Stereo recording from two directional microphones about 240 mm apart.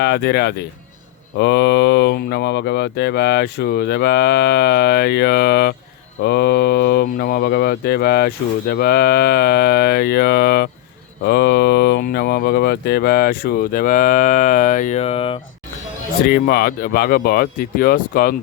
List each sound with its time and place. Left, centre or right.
0.0 s speech: left
16.2 s speech: left